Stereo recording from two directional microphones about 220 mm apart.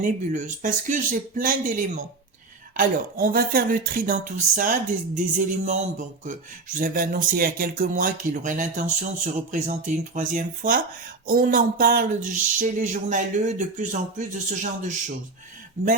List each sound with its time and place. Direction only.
0.0 s speech: 35° right (ahead or behind)
2.7 s speech: 40° right (ahead or behind)